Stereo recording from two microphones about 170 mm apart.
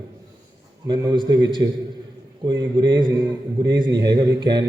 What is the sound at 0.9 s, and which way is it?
A man's voice, 25° right (ahead or behind).